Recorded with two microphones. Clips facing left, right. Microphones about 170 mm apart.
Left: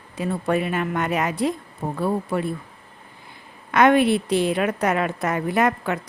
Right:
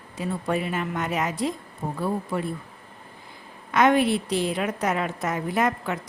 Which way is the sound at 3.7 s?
60° left (ahead or behind).